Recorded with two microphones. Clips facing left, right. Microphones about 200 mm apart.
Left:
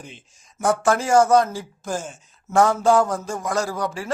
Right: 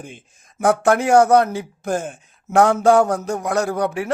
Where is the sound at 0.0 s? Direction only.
50° right (ahead or behind).